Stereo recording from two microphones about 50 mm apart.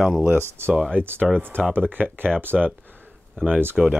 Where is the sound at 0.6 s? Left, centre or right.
Right.